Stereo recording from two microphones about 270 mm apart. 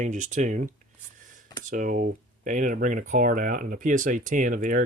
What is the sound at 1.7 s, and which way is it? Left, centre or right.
Speech, right.